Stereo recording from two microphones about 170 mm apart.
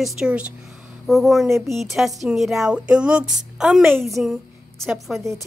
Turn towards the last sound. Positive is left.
turn(degrees=0)  # may be behind; listen again after turning